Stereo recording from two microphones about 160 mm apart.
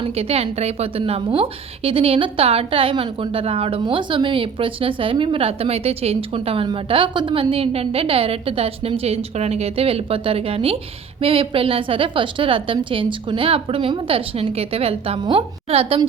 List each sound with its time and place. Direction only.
0.0 s a woman's voice: 40° right (ahead or behind)